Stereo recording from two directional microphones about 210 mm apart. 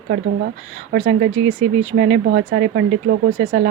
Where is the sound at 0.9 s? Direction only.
50° right (ahead or behind).